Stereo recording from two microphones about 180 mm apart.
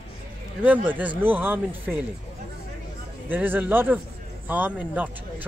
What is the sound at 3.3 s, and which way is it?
Speech, 10° right (ahead or behind).